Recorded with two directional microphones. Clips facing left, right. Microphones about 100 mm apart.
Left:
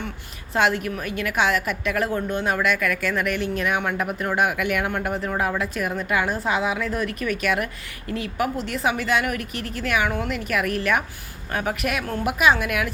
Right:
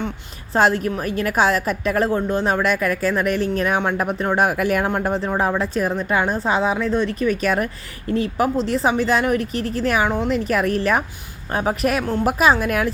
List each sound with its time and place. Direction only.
0.5 s a woman's voice: 35° right (ahead or behind)